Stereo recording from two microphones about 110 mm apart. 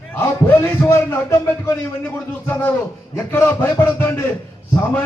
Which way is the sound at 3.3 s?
20° left (ahead or behind).